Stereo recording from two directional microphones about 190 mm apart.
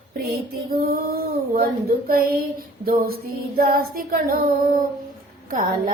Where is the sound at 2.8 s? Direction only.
50° right (ahead or behind).